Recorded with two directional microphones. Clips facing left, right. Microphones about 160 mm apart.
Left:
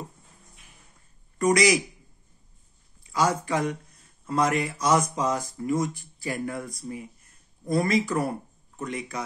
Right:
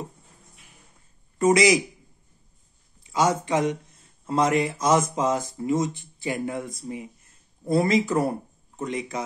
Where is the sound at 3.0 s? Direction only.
20° right (ahead or behind).